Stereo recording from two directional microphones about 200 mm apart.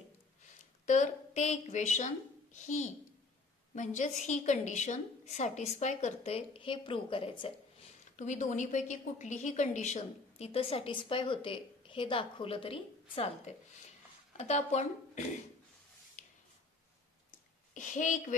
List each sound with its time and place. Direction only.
0.8 s a woman's voice: 35° left (ahead or behind)
8.2 s a woman's voice: 40° left (ahead or behind)
16.2 s a sound: 40° left (ahead or behind)
17.7 s a woman's voice: 40° left (ahead or behind)